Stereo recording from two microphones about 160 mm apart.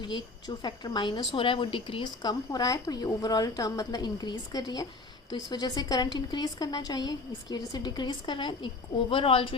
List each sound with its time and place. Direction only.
0.0 s a woman's voice: 30° left (ahead or behind)